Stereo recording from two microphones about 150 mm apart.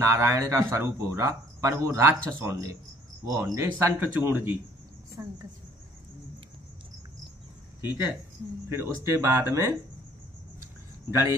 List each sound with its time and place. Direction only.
0.0 s speech: 20° right (ahead or behind)
3.7 s speech: 15° right (ahead or behind)
8.6 s speech: 20° right (ahead or behind)
11.1 s speech: 15° right (ahead or behind)